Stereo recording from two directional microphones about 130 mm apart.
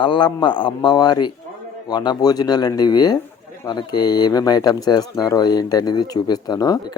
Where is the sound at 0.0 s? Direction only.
35° left (ahead or behind).